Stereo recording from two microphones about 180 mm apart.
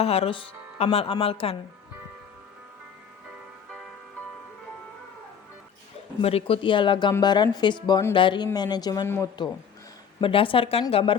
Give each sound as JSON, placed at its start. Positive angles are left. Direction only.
{"t": 0.0, "sound": "speech", "side_deg": 35}
{"t": 6.2, "sound": "speech", "side_deg": 30}
{"t": 10.2, "sound": "speech", "side_deg": 30}